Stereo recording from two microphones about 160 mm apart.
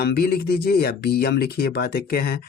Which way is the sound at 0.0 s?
70° left (ahead or behind).